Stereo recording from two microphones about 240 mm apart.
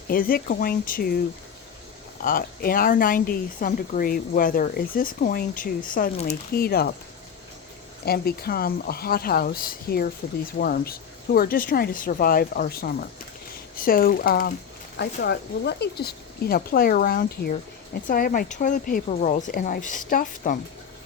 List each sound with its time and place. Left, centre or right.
0.1 s speech: left
2.2 s speech: left
8.0 s speech: left